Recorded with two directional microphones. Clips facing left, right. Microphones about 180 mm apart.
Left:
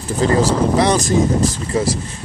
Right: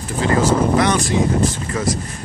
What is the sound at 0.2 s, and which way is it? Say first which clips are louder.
Speech: left 1 dB; 35° left (ahead or behind).